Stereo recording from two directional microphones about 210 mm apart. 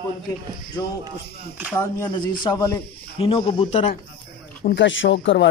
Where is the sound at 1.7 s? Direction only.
15° left (ahead or behind).